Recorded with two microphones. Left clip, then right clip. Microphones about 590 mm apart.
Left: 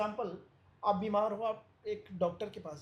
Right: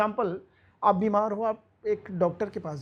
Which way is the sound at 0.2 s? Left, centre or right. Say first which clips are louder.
Right 10 dB; right.